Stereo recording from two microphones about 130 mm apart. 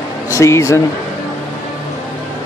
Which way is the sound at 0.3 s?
25° left (ahead or behind).